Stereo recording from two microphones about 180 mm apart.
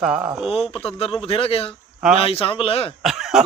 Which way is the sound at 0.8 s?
35° left (ahead or behind).